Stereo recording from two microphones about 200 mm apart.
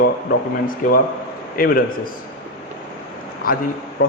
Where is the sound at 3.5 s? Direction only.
45° left (ahead or behind).